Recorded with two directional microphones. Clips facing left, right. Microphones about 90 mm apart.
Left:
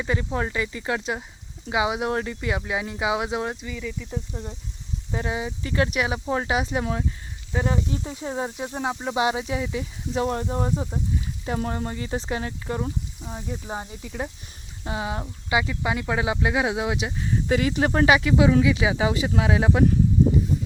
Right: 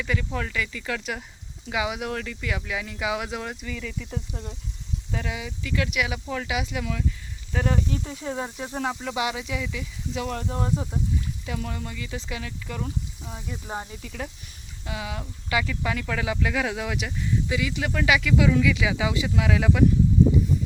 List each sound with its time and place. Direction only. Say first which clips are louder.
0.0 s speech: left 3 dB; 30° left (ahead or behind)
3.7 s speech: left 1 dB; 10° left (ahead or behind)
5.1 s speech: left 5 dB; 30° left (ahead or behind)
7.5 s speech: left 1 dB; 20° left (ahead or behind)
14.0 s speech: left 3 dB; 20° left (ahead or behind)
14.8 s speech: left 4 dB; 30° left (ahead or behind)
17.5 s speech: left 10 dB; 45° left (ahead or behind); by 19.8 s 30° left (ahead or behind)